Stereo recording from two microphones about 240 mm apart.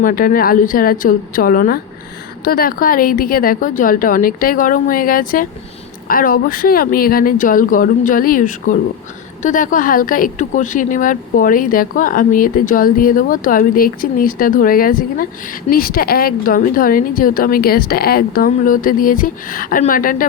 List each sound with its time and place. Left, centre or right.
0.0 s speech: left